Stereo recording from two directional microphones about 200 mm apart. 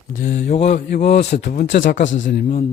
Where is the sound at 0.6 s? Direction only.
60° left (ahead or behind).